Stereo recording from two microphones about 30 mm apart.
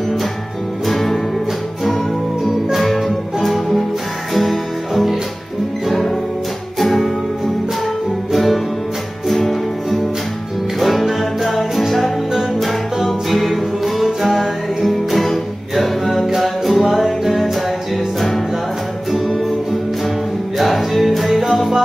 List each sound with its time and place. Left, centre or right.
0.8 s music: centre
2.4 s music: centre
6.8 s music: centre
20.5 s music: centre